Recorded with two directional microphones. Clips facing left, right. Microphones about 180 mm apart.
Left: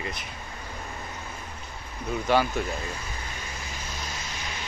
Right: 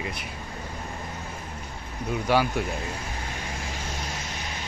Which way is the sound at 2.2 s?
10° right (ahead or behind).